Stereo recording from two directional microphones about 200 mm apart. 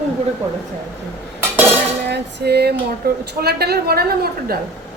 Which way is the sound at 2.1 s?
55° right (ahead or behind).